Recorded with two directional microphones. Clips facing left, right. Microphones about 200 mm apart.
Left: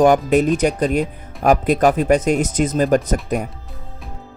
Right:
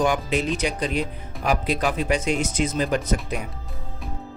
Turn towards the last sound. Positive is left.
turn(degrees=45)  # may be behind; listen again after turning